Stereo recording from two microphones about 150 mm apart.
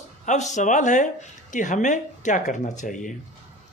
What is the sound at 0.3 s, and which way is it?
Speech, 55° left (ahead or behind).